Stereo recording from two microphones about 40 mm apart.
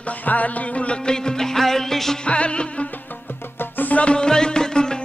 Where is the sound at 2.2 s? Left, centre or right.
Left.